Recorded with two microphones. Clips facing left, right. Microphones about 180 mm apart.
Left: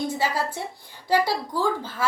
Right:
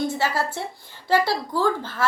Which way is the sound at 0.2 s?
15° left (ahead or behind).